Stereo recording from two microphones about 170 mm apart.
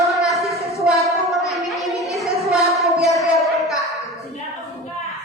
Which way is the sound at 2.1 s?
Centre (ahead or behind).